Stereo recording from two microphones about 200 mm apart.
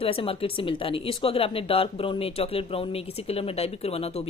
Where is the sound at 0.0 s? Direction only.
25° left (ahead or behind).